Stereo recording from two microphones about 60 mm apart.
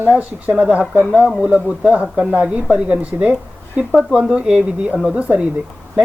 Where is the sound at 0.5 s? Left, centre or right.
Centre.